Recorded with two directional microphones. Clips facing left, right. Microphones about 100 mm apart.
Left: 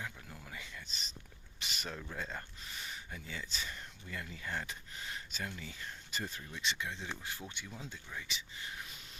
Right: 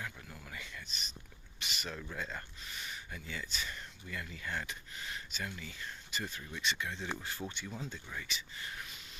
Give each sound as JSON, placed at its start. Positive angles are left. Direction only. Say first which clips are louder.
{"t": 0.4, "sound": "a sound", "louder": "right 1 dB", "side_deg": 25}
{"t": 2.1, "sound": "speech", "louder": "right 1 dB", "side_deg": 30}
{"t": 6.6, "sound": "speech", "louder": "right 2 dB", "side_deg": 25}